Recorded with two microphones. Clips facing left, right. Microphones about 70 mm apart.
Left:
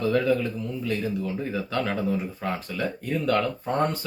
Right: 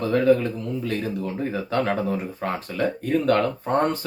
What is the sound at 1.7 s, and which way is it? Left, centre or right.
Speech, right.